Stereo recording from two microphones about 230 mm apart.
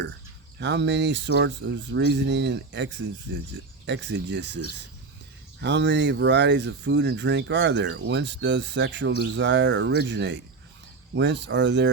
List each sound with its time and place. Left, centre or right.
0.6 s speech: right